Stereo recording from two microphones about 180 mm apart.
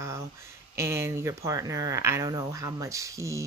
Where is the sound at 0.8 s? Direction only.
15° right (ahead or behind).